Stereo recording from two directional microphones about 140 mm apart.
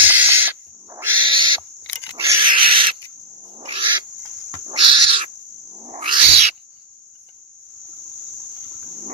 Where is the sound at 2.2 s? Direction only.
30° right (ahead or behind).